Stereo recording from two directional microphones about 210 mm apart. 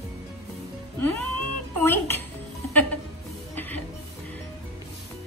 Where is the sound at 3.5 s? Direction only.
10° left (ahead or behind).